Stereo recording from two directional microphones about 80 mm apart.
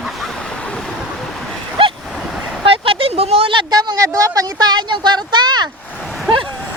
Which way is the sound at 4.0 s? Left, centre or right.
Right.